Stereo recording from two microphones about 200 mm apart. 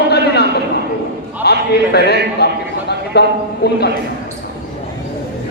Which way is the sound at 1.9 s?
55° left (ahead or behind).